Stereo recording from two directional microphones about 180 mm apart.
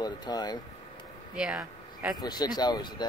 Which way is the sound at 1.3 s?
5° right (ahead or behind).